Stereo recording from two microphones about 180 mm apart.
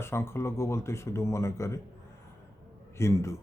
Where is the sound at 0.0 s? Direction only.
15° left (ahead or behind).